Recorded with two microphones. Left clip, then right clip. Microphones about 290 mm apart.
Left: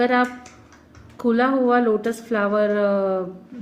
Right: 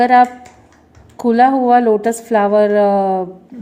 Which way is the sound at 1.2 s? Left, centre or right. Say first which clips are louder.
Right 7 dB; right.